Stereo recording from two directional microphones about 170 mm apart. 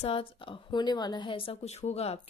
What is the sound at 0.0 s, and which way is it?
A woman's voice, 35° left (ahead or behind).